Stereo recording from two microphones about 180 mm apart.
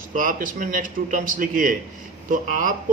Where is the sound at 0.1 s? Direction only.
50° right (ahead or behind).